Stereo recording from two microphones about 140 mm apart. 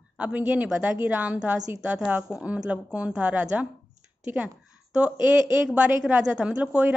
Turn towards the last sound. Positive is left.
turn(degrees=-10)  # may be behind; listen again after turning